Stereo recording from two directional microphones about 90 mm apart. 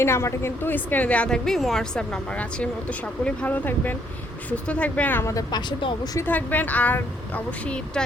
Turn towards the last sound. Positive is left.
turn(degrees=15)  # may be behind; listen again after turning